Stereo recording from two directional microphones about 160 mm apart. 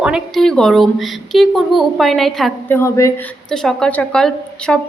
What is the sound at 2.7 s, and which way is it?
Speech, 20° left (ahead or behind).